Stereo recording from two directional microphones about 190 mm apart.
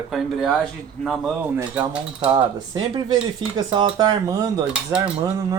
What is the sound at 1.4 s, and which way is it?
Cutlery, 10° right (ahead or behind).